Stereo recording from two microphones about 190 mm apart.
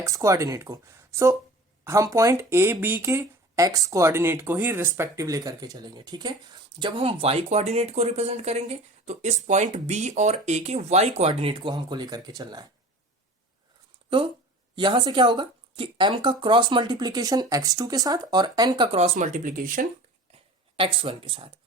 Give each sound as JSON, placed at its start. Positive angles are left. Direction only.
{"t": 0.0, "sound": "speech", "side_deg": -15}
{"t": 14.8, "sound": "speech", "side_deg": -25}
{"t": 20.7, "sound": "speech", "side_deg": -30}